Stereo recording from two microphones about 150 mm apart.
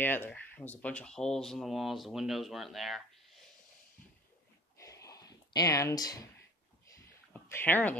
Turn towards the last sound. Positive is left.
turn(degrees=15)  # may be behind; listen again after turning